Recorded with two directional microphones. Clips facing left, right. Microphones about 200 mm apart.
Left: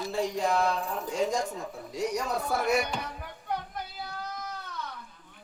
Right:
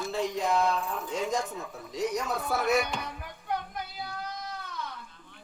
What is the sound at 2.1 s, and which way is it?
Music, 15° left (ahead or behind).